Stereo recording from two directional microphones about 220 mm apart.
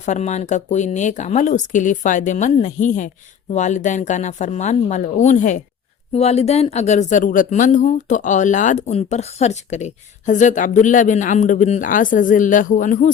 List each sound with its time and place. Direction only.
0.0 s speech: 30° left (ahead or behind)